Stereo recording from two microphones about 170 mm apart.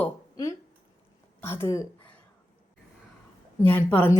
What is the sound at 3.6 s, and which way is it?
Speech, 10° left (ahead or behind).